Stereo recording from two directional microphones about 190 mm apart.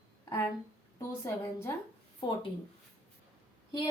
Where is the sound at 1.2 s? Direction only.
15° left (ahead or behind).